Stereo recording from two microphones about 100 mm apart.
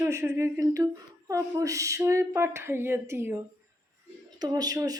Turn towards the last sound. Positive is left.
turn(degrees=-40)  # may be behind; listen again after turning